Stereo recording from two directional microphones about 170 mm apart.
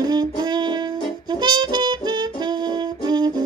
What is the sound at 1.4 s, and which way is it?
Music, 25° right (ahead or behind).